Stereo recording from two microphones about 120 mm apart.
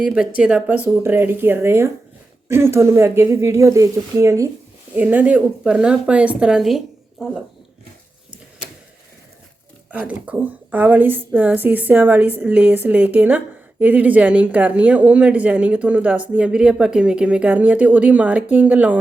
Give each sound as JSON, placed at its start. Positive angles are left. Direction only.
{"t": 0.0, "sound": "a woman's voice", "side_deg": -5}
{"t": 4.9, "sound": "a woman's voice", "side_deg": -15}
{"t": 9.9, "sound": "a woman's voice", "side_deg": -10}